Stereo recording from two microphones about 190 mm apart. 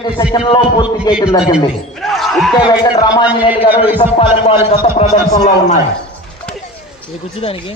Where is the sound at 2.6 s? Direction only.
20° left (ahead or behind).